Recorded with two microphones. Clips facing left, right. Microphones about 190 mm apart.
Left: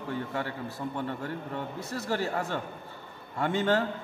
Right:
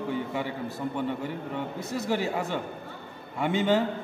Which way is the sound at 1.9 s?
15° right (ahead or behind).